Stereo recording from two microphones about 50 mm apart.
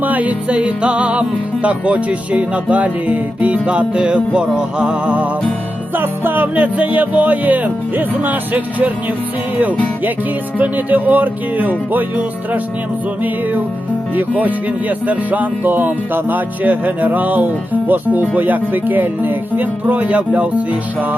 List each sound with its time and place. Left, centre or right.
0.0 s speech: right
6.0 s music: right
10.6 s music: right
14.2 s music: right